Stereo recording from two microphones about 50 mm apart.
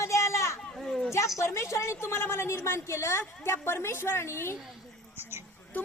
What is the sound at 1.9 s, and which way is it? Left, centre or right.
A woman's voice, left.